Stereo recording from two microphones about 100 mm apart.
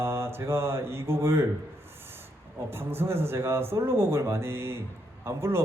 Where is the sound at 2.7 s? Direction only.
20° right (ahead or behind).